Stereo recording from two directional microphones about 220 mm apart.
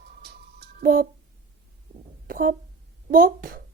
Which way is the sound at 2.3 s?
40° right (ahead or behind).